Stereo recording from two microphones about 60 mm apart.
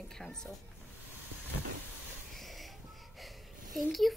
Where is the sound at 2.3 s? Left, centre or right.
Centre.